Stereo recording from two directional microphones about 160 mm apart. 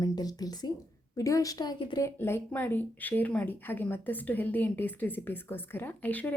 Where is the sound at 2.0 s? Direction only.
15° left (ahead or behind).